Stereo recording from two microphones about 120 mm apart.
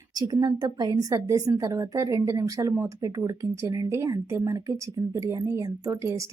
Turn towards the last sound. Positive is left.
turn(degrees=-25)  # may be behind; listen again after turning